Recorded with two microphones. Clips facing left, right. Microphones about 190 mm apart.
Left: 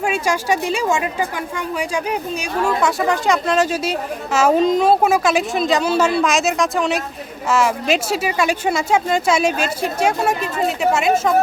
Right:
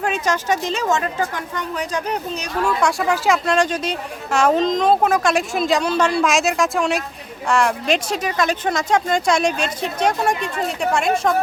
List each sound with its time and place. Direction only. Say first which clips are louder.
0.0 s a woman's voice: left 1 dB; 10° left (ahead or behind)
2.8 s a woman's voice: right 1 dB; centre (ahead or behind)